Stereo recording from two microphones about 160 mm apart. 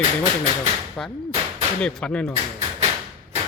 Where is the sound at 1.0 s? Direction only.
5° left (ahead or behind).